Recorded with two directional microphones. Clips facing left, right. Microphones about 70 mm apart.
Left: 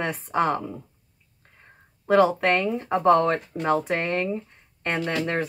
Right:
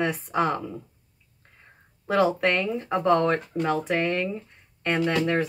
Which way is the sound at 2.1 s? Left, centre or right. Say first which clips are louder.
Left 3 dB; left.